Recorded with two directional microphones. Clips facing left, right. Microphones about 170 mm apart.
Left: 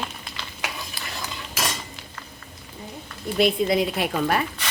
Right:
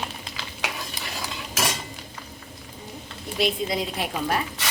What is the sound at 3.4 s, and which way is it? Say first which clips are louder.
A woman's voice: left 5 dB; 60° left (ahead or behind).